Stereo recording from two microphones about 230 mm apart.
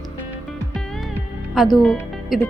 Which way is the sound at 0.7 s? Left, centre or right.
Centre.